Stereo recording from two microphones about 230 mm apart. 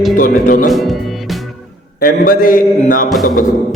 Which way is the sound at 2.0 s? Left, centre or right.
Left.